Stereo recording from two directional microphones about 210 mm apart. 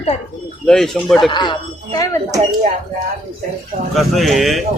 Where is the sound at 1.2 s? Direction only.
20° left (ahead or behind).